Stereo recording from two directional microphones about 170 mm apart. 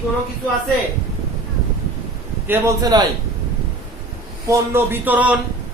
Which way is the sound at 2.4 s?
20° right (ahead or behind).